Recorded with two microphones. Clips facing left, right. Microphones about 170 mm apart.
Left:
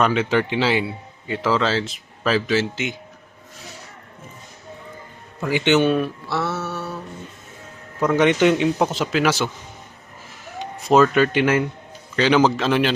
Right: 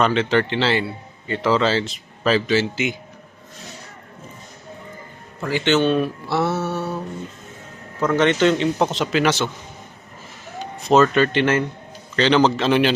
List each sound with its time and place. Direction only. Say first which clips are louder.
0.0 s a man's voice: right 1 dB; 10° left (ahead or behind)
5.5 s a man's voice: left 1 dB; 15° left (ahead or behind)
6.2 s mantra: right 4 dB; 15° right (ahead or behind)
8.0 s a man's voice: left 1 dB; 15° left (ahead or behind)
10.8 s a man's voice: even; 5° left (ahead or behind)